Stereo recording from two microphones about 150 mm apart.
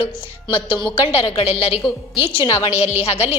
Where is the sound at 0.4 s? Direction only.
35° left (ahead or behind).